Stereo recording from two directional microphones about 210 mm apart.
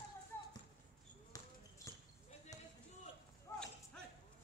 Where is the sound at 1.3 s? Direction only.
15° left (ahead or behind).